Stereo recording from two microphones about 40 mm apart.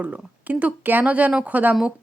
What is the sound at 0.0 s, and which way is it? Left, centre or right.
Speech, right.